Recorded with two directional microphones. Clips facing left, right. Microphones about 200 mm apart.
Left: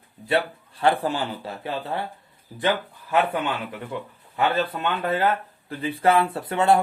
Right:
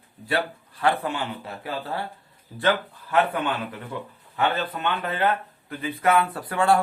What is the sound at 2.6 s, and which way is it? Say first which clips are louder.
Speech: right 1 dB; 15° left (ahead or behind).